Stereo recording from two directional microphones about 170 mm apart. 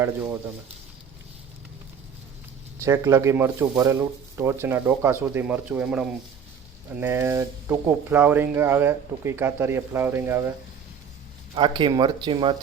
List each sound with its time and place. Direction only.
0.0 s speech: 15° right (ahead or behind)
2.8 s speech: 15° right (ahead or behind)
11.5 s speech: 25° right (ahead or behind)